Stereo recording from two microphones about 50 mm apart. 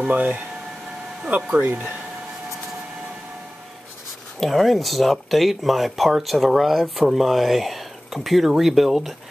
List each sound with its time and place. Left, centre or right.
0.1 s speech: right
1.5 s speech: right
4.4 s speech: centre